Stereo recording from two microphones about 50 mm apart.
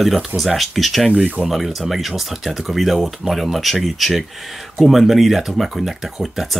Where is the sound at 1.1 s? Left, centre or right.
Right.